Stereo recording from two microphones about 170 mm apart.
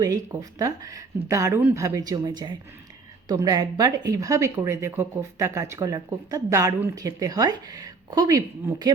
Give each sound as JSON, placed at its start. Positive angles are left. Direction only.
{"t": 0.0, "sound": "speech", "side_deg": -20}